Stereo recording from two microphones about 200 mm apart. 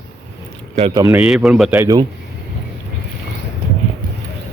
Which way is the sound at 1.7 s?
15° right (ahead or behind).